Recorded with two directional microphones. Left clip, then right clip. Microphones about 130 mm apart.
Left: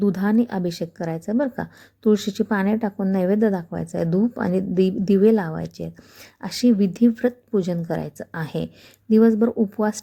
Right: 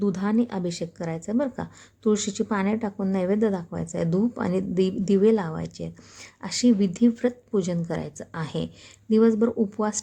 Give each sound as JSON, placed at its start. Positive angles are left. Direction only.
{"t": 0.0, "sound": "a woman's voice", "side_deg": 30}